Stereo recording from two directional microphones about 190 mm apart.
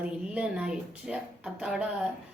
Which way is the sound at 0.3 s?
5° right (ahead or behind).